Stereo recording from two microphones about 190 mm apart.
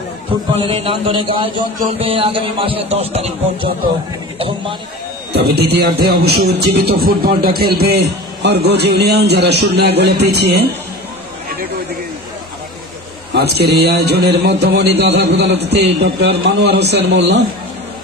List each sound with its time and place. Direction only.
0.6 s speech: 30° right (ahead or behind)
4.4 s a man's voice: 30° right (ahead or behind)
5.3 s a man's voice: 55° right (ahead or behind)
13.3 s a man's voice: 60° right (ahead or behind)